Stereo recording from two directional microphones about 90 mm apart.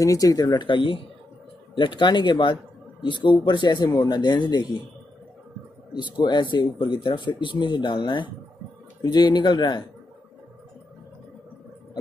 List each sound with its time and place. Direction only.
0.0 s speech: 40° left (ahead or behind); by 1.0 s 70° left (ahead or behind)
1.8 s speech: 60° left (ahead or behind)
5.9 s speech: 55° left (ahead or behind)